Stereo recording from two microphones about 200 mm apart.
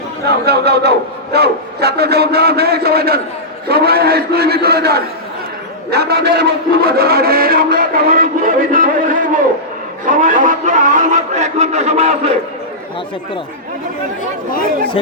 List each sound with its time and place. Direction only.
0.3 s a man's voice: 55° right (ahead or behind)
10.1 s a man's voice: 40° right (ahead or behind)